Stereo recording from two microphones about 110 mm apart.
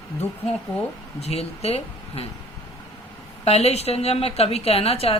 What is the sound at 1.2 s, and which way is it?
Speech, 70° left (ahead or behind).